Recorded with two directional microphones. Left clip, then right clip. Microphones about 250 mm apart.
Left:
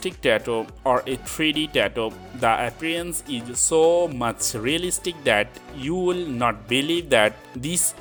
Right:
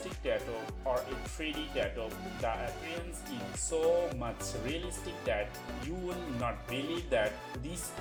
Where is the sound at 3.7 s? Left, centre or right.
Left.